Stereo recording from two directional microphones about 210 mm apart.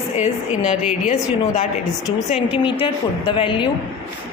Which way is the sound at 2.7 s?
25° left (ahead or behind).